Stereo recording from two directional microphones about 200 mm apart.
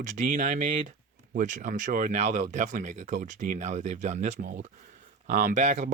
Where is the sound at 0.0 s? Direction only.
40° right (ahead or behind).